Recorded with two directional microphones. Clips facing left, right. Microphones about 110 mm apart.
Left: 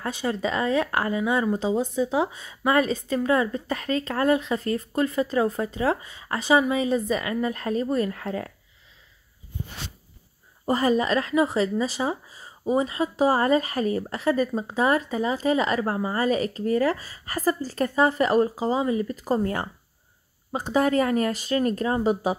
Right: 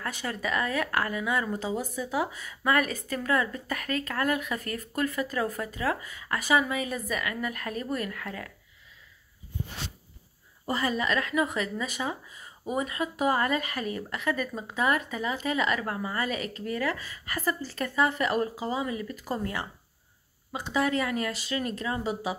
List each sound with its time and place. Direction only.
0.0 s speech: 20° left (ahead or behind)
10.6 s speech: 40° left (ahead or behind)